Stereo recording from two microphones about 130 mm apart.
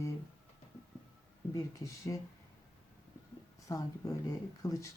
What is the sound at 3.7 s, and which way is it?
Speech, 25° left (ahead or behind).